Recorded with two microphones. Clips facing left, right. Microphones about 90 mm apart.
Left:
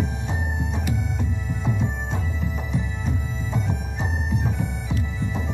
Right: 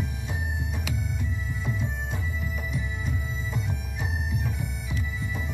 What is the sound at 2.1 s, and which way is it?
Music, 25° left (ahead or behind).